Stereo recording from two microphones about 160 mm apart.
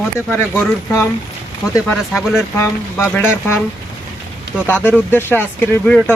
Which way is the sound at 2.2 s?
Centre (ahead or behind).